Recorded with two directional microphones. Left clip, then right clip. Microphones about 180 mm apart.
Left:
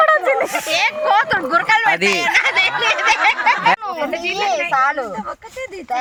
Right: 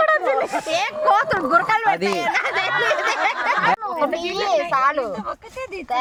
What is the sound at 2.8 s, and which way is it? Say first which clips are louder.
Snicker: left 5 dB; 60° right (ahead or behind).